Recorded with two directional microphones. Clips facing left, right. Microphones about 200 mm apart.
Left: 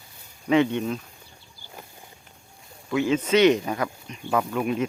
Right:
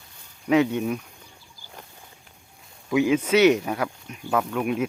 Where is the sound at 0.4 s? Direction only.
5° right (ahead or behind).